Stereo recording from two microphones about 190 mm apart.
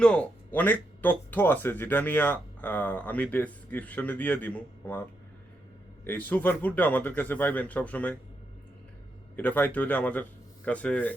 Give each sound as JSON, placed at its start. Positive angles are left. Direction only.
{"t": 0.0, "sound": "speech", "side_deg": 5}
{"t": 6.1, "sound": "speech", "side_deg": 10}
{"t": 9.3, "sound": "speech", "side_deg": 10}